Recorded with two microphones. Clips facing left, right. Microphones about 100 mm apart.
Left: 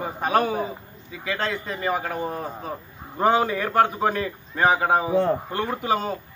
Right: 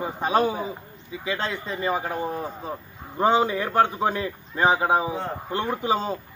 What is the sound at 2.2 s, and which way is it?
Speech, centre (ahead or behind).